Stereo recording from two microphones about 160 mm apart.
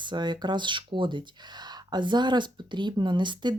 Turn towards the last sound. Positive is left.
turn(degrees=-30)  # may be behind; listen again after turning